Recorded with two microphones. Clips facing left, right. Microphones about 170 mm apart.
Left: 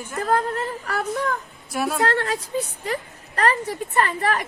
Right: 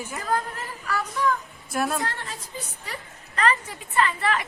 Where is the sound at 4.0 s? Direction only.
45° left (ahead or behind).